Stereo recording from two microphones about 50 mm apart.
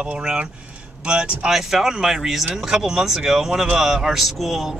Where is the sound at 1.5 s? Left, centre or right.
Centre.